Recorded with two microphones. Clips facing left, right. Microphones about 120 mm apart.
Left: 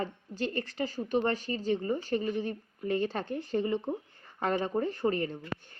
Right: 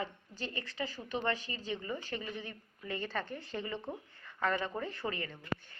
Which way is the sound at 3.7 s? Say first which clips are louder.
Left 9 dB; 25° left (ahead or behind).